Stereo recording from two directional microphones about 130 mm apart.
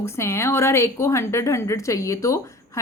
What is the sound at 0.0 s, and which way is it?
A woman's voice, 20° left (ahead or behind).